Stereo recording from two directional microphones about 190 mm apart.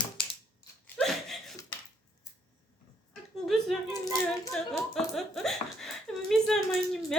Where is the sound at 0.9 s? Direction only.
Centre (ahead or behind).